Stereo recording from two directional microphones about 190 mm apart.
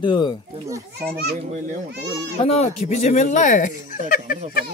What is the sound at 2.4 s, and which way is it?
Speech, 35° left (ahead or behind).